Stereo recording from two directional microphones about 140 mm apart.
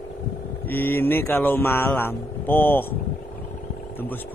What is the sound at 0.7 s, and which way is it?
Speech, 15° left (ahead or behind).